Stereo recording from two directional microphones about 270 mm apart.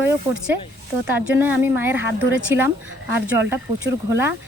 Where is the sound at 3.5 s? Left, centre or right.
Centre.